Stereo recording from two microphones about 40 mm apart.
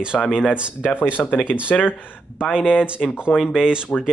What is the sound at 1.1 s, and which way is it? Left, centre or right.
Speech, left.